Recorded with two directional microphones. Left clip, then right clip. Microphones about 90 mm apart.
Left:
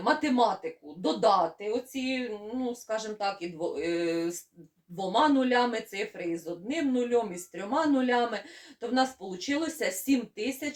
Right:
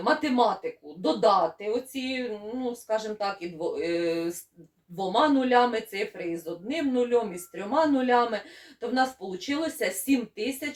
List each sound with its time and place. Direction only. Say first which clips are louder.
0.0 s speech: right 2 dB; 35° left (ahead or behind)